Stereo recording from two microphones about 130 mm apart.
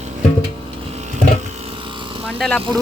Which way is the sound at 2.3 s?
5° left (ahead or behind).